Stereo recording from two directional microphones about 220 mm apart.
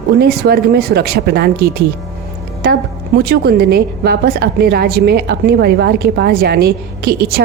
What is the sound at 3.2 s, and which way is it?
A woman's voice, 45° right (ahead or behind).